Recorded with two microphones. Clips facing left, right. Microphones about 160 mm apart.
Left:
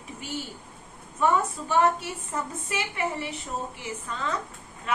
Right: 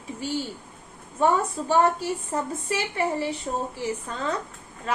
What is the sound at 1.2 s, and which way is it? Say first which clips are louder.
A woman's voice: right 2 dB; 30° right (ahead or behind).